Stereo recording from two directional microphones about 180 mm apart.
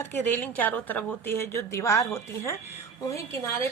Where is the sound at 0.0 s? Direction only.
10° left (ahead or behind).